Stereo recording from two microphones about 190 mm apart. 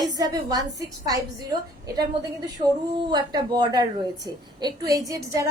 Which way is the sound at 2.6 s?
25° right (ahead or behind).